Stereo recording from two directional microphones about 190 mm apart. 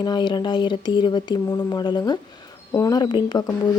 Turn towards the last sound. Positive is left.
turn(degrees=20)  # may be behind; listen again after turning